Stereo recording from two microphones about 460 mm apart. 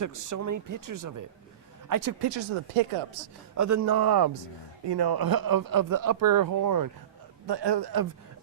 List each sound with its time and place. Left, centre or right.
0.0 s speech: right
3.5 s speech: right
7.4 s speech: right